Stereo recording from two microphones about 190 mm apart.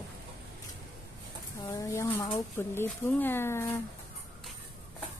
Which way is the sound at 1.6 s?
15° left (ahead or behind).